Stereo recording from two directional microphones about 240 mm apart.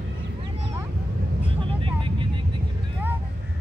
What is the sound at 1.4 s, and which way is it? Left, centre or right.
Vehicle, right.